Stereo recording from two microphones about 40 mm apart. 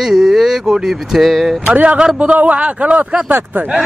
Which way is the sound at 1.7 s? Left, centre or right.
Right.